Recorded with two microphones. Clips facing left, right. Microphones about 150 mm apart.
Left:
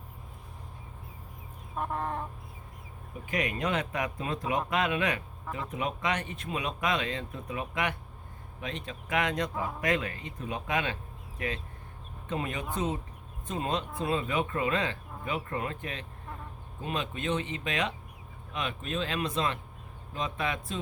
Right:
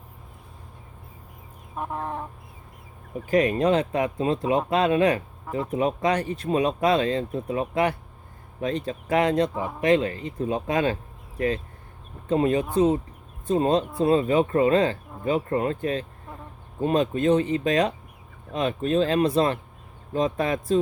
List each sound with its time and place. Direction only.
1.7 s chicken: 5° right (ahead or behind)
3.2 s speech: 35° right (ahead or behind)